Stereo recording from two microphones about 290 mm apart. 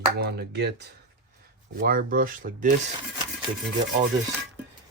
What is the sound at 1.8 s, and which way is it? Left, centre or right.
Speech, right.